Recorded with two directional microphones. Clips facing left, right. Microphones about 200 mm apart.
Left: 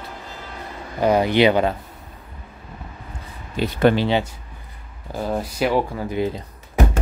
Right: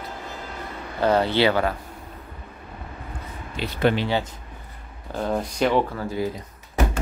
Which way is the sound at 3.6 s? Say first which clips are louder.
Left 5 dB; 45° left (ahead or behind).